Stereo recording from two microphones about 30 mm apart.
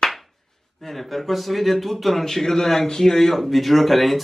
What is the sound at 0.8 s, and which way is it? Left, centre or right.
Speech, centre.